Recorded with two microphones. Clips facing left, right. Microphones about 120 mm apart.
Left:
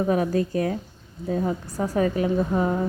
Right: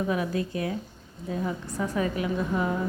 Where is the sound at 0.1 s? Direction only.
40° left (ahead or behind).